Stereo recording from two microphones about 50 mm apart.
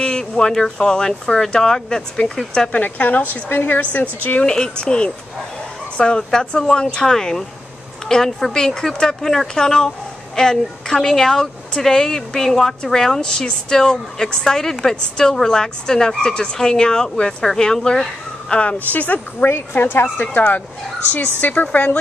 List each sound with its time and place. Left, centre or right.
0.0 s speech: centre
2.7 s a woman's voice: left
4.5 s speech: centre
18.5 s speech: left
19.5 s speech: left
20.2 s a woman's voice: left